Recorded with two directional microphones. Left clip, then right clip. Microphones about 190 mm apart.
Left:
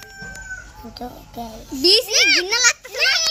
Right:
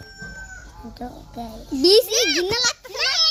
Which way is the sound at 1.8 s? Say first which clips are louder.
Right 1 dB; 50° right (ahead or behind).